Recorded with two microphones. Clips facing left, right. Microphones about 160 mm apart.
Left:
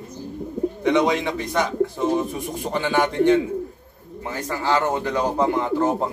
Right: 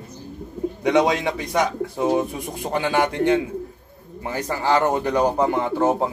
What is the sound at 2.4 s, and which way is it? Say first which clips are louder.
A man's voice: even; 15° right (ahead or behind).